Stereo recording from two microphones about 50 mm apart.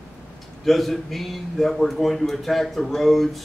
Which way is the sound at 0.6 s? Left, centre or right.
Centre.